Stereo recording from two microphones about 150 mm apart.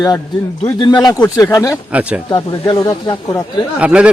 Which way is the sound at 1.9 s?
10° right (ahead or behind).